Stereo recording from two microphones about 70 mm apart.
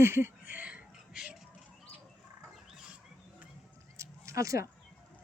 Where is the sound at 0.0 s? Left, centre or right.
Right; by 1.4 s centre.